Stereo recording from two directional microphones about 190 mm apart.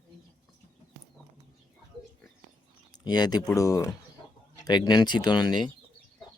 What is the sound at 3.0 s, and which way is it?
Speech, 20° left (ahead or behind).